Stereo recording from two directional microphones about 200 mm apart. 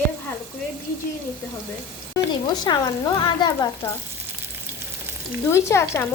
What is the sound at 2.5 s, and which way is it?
A woman's voice, 20° left (ahead or behind).